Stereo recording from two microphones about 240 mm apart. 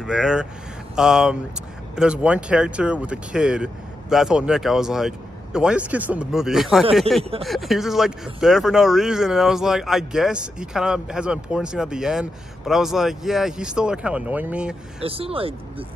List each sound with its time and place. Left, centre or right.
0.0 s speech: centre
15.0 s speech: right